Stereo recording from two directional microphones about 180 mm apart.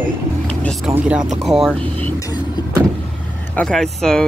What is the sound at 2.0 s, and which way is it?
Vehicle, 15° left (ahead or behind).